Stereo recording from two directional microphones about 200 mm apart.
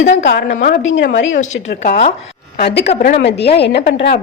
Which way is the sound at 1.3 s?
35° left (ahead or behind).